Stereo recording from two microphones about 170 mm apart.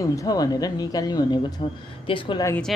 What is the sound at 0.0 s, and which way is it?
Speech, 20° left (ahead or behind).